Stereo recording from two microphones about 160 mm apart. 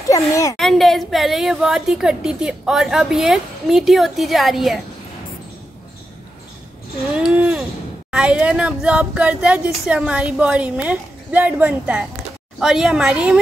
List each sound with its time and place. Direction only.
0.1 s speech: 20° left (ahead or behind)
0.6 s a woman's voice: centre (ahead or behind)
7.2 s a woman's voice: 5° right (ahead or behind)